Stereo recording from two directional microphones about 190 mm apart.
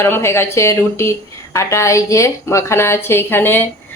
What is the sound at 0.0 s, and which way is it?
Speech, 15° left (ahead or behind).